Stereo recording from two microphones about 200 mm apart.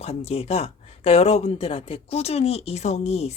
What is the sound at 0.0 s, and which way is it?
Speech, 30° left (ahead or behind).